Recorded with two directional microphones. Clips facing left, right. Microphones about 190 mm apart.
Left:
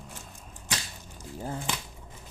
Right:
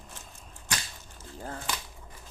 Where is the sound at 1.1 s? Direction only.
15° left (ahead or behind).